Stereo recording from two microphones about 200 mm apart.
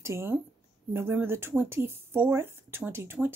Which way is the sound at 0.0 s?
15° right (ahead or behind).